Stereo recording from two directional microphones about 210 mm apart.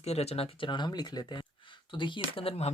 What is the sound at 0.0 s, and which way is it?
Speech, 30° left (ahead or behind).